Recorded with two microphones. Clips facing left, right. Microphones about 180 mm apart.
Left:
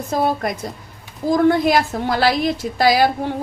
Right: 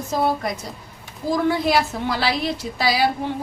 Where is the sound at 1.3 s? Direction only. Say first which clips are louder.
Left 4 dB; 50° left (ahead or behind).